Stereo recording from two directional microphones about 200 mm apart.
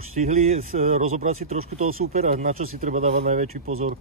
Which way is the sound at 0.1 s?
40° right (ahead or behind).